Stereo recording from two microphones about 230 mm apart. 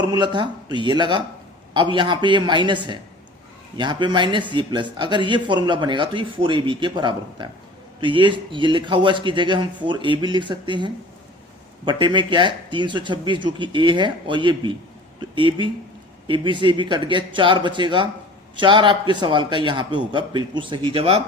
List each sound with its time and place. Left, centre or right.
0.0 s speech: centre
3.8 s speech: centre